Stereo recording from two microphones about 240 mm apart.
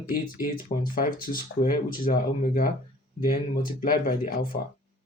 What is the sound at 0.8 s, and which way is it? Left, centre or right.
Speech, left.